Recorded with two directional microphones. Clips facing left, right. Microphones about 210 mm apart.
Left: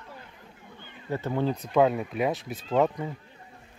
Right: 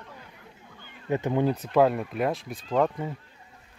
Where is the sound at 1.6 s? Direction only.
Centre (ahead or behind).